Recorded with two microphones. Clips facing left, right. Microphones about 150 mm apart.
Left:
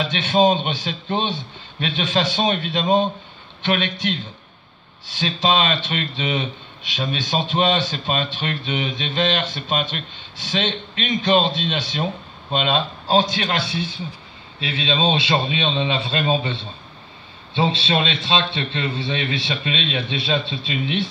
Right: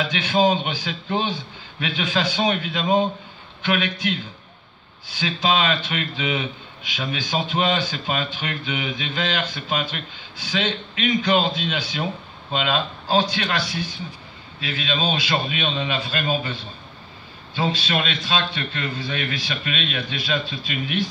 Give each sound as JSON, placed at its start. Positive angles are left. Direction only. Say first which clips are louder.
{"t": 0.0, "sound": "speech", "louder": "left 2 dB", "side_deg": 25}